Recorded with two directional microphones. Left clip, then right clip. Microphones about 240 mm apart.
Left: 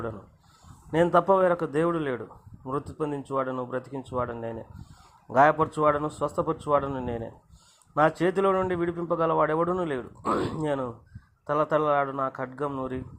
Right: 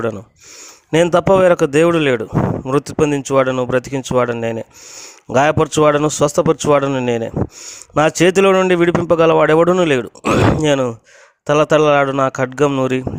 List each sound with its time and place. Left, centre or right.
0.9 s speech: right